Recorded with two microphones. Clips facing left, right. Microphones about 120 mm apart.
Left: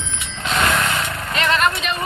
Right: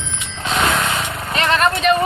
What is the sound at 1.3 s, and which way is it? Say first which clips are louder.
Vehicle: right 2 dB; 40° right (ahead or behind).